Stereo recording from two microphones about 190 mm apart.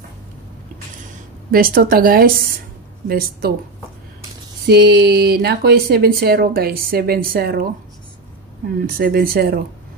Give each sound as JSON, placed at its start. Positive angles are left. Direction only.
{"t": 1.5, "sound": "speech", "side_deg": -50}
{"t": 4.6, "sound": "speech", "side_deg": -55}
{"t": 8.8, "sound": "speech", "side_deg": -50}